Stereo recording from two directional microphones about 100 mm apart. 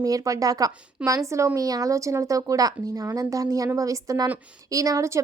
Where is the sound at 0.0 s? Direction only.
35° right (ahead or behind).